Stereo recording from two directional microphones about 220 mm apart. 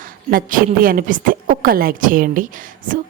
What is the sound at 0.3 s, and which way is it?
A woman's voice, 40° right (ahead or behind).